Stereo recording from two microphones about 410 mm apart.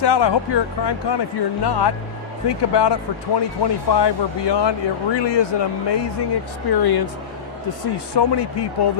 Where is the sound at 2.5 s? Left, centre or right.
Left.